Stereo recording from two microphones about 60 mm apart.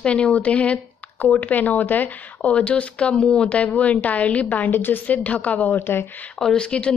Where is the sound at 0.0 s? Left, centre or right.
Centre; by 6.0 s left.